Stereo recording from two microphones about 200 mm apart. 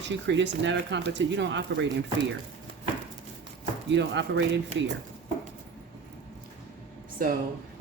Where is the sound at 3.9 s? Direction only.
65° right (ahead or behind).